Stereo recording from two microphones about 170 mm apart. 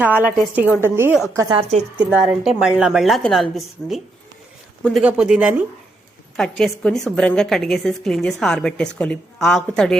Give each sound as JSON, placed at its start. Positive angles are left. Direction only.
{"t": 0.0, "sound": "a woman's voice", "side_deg": -10}
{"t": 1.4, "sound": "a woman's voice", "side_deg": -25}
{"t": 2.0, "sound": "a woman's voice", "side_deg": -5}
{"t": 5.0, "sound": "a woman's voice", "side_deg": -5}
{"t": 6.3, "sound": "a woman's voice", "side_deg": 5}